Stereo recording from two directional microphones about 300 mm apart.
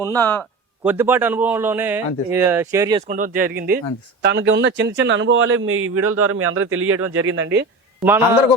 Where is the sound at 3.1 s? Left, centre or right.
Right.